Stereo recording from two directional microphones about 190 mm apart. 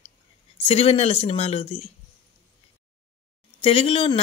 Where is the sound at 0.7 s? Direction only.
35° left (ahead or behind).